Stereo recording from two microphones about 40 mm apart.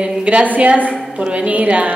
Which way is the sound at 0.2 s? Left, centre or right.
Right.